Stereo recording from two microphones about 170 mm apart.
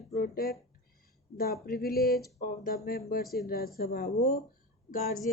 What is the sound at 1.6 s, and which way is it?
Speech, 60° left (ahead or behind).